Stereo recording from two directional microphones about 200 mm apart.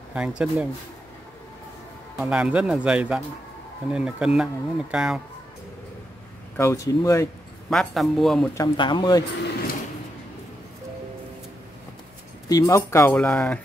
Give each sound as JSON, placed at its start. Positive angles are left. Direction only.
{"t": 0.1, "sound": "speech", "side_deg": -5}
{"t": 2.1, "sound": "speech", "side_deg": -5}
{"t": 6.5, "sound": "speech", "side_deg": 15}
{"t": 7.7, "sound": "speech", "side_deg": 0}
{"t": 8.5, "sound": "speech", "side_deg": 25}
{"t": 12.4, "sound": "speech", "side_deg": 15}